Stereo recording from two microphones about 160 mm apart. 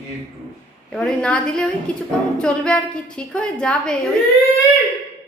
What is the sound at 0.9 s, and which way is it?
A woman's voice, 5° left (ahead or behind).